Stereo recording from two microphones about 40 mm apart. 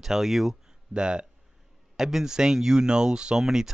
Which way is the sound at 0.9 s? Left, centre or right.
Right.